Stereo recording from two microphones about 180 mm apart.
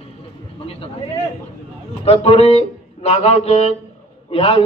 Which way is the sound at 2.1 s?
35° left (ahead or behind).